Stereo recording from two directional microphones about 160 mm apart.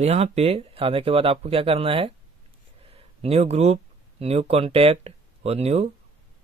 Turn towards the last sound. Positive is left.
turn(degrees=-40)  # may be behind; listen again after turning